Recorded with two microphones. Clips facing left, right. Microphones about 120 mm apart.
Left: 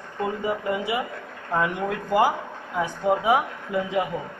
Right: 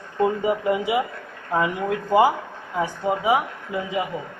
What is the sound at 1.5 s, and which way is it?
Speech, 5° right (ahead or behind).